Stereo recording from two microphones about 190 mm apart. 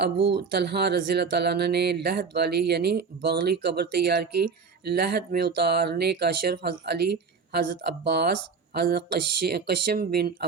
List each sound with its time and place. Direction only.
0.0 s speech: 60° right (ahead or behind)